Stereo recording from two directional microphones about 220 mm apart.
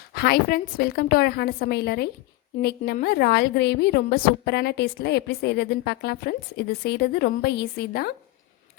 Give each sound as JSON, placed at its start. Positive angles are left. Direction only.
{"t": 0.1, "sound": "a woman's voice", "side_deg": 45}